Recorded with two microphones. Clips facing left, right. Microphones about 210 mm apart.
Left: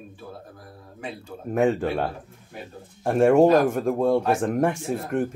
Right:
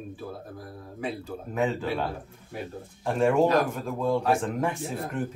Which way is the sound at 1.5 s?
50° left (ahead or behind).